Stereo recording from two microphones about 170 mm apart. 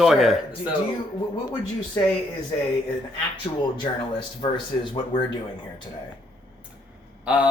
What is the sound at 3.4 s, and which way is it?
Speech, 25° left (ahead or behind).